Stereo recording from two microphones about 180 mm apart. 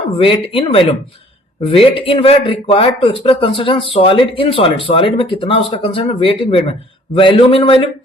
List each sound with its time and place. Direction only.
0.2 s speech: 30° left (ahead or behind)